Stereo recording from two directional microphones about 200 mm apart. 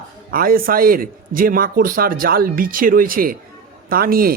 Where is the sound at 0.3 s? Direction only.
45° right (ahead or behind).